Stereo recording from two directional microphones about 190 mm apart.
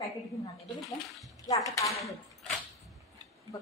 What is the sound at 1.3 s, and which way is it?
Speech, 15° left (ahead or behind).